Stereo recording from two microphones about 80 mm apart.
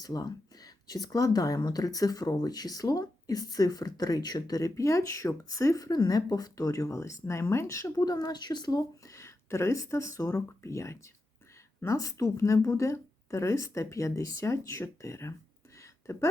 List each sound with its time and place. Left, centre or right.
0.0 s speech: left
8.0 s speech: left
9.0 s speech: left
15.8 s a sound: left